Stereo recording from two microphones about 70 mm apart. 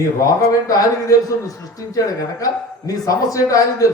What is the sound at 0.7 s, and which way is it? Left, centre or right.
A man's voice, left.